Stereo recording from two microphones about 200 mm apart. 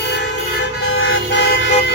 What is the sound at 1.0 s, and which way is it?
Vehicle, 75° left (ahead or behind).